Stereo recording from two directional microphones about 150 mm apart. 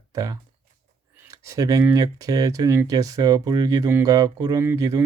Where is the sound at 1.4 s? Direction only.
20° right (ahead or behind).